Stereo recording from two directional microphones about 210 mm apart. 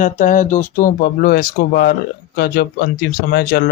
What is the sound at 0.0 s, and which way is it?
Speech, 40° left (ahead or behind).